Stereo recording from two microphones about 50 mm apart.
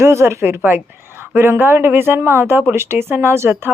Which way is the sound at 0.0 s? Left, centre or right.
Right.